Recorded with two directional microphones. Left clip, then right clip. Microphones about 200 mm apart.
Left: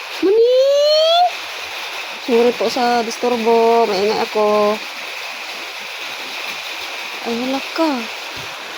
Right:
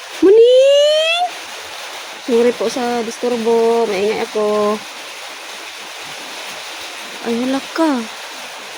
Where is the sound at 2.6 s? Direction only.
15° right (ahead or behind).